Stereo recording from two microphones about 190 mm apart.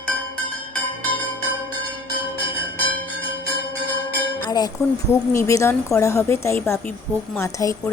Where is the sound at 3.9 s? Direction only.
10° left (ahead or behind).